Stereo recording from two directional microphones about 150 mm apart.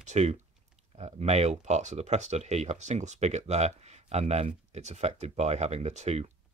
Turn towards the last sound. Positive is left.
turn(degrees=-50)  # may be behind; listen again after turning